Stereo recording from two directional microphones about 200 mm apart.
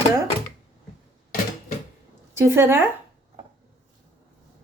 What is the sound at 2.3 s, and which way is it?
Speech, 15° right (ahead or behind).